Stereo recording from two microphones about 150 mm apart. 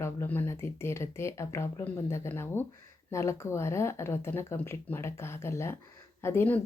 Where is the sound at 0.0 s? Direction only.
15° left (ahead or behind).